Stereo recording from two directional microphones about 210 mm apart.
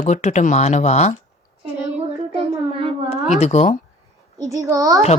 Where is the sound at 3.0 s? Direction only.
30° left (ahead or behind).